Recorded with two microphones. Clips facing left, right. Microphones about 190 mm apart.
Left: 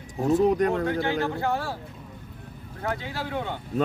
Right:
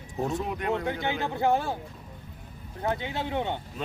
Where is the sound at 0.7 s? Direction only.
20° right (ahead or behind).